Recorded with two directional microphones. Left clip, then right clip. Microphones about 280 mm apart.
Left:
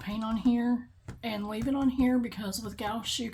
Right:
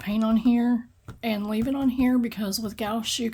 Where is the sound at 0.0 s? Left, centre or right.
Right.